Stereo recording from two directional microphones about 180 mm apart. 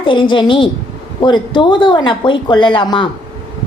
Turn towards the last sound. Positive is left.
turn(degrees=25)  # may be behind; listen again after turning